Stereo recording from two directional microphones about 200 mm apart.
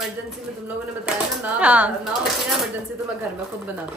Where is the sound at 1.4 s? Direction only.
5° right (ahead or behind).